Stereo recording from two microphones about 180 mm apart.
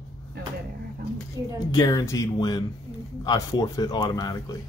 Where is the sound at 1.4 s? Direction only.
20° right (ahead or behind).